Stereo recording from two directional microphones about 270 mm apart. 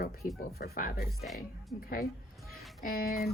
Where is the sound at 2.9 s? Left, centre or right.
Left.